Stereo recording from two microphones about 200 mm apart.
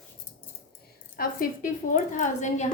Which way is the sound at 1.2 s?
50° left (ahead or behind).